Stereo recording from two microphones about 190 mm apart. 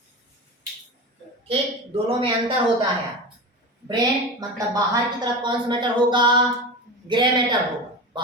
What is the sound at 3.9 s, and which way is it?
Speech, 20° right (ahead or behind).